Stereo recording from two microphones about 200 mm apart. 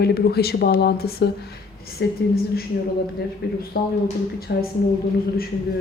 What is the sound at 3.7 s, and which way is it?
Speech, 50° left (ahead or behind).